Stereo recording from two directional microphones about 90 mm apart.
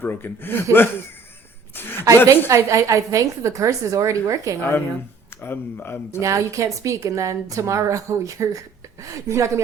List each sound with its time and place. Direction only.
0.0 s speech: 25° left (ahead or behind)
2.2 s a woman's voice: 35° right (ahead or behind)
5.4 s speech: 25° left (ahead or behind)
6.1 s a woman's voice: 35° right (ahead or behind)